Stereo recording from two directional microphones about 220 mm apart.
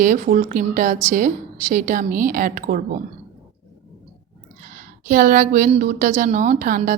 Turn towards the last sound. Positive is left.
turn(degrees=-40)  # may be behind; listen again after turning